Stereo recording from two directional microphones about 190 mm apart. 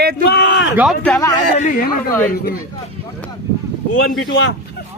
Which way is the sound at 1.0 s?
10° left (ahead or behind).